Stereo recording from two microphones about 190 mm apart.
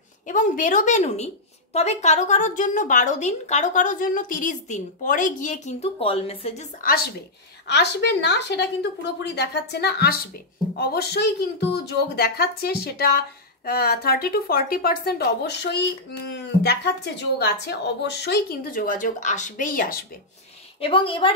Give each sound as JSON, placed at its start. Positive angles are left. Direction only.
{"t": 0.3, "sound": "a woman's voice", "side_deg": 45}
{"t": 7.6, "sound": "a woman's voice", "side_deg": 65}
{"t": 20.8, "sound": "a woman's voice", "side_deg": 30}